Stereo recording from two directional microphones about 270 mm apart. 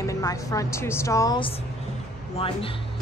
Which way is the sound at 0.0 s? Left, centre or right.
Centre.